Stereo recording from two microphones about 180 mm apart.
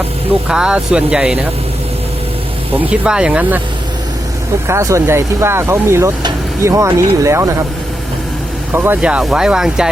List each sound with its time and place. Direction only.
0.4 s speech: 5° right (ahead or behind)
2.9 s speech: 5° right (ahead or behind)
4.7 s speech: 15° right (ahead or behind)
8.7 s speech: 10° right (ahead or behind)